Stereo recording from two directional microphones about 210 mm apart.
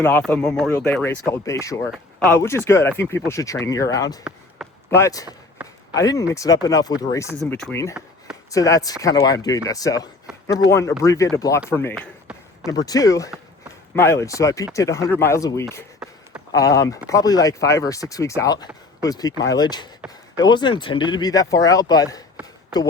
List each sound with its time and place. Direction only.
0.0 s speech: 5° left (ahead or behind)
4.2 s basketball bounce: 5° right (ahead or behind)
4.9 s speech: 15° left (ahead or behind)
11.9 s a sound: centre (ahead or behind)
12.7 s speech: 15° left (ahead or behind)
16.0 s a sound: centre (ahead or behind)
16.5 s speech: 15° left (ahead or behind)